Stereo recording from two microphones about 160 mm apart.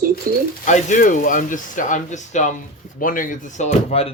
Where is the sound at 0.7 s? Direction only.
50° left (ahead or behind).